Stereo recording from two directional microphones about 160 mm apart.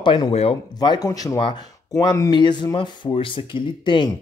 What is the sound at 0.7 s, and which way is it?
Speech, 25° left (ahead or behind).